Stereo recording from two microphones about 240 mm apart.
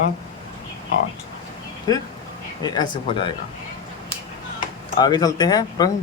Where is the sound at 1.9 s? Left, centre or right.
Centre.